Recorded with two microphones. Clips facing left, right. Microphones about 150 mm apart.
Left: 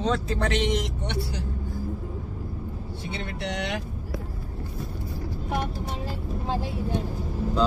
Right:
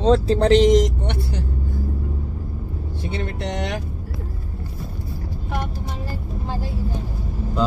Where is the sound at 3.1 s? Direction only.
45° right (ahead or behind).